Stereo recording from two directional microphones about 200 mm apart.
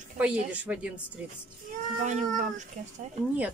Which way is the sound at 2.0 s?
35° right (ahead or behind).